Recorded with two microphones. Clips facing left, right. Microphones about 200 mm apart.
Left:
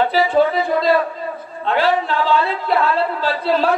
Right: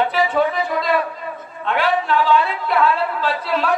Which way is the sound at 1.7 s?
30° left (ahead or behind).